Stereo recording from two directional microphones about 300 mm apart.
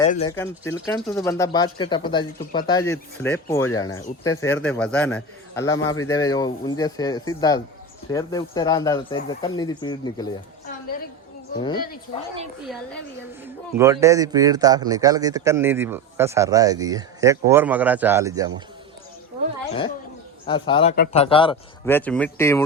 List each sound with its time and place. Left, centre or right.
0.3 s speech: centre
12.6 s a woman's voice: centre
13.7 s speech: centre
20.5 s speech: centre
20.9 s speech: left
21.2 s speech: centre